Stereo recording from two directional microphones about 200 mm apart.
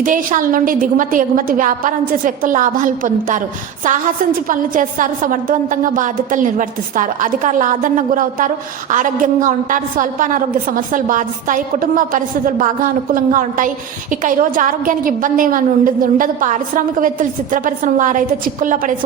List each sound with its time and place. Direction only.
0.0 s a woman's voice: 40° right (ahead or behind)